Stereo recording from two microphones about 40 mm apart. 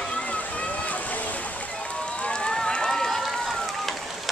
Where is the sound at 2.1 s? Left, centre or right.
Left.